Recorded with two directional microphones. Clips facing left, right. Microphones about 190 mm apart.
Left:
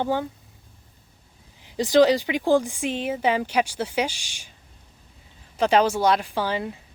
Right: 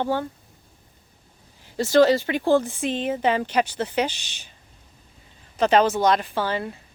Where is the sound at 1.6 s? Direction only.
15° left (ahead or behind).